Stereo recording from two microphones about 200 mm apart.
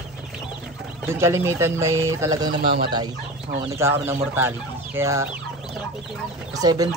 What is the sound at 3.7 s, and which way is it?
Speech, 10° right (ahead or behind).